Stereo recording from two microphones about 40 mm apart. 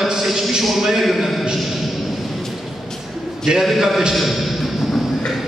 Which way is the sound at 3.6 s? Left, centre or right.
Centre.